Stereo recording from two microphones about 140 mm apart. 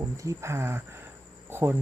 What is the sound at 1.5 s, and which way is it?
Cricket, 15° right (ahead or behind).